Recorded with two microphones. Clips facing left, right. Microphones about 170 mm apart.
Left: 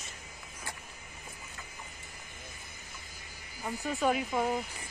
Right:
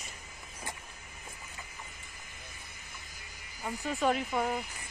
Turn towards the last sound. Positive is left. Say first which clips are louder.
# left 1 dB
turn(degrees=0)  # may be behind; listen again after turning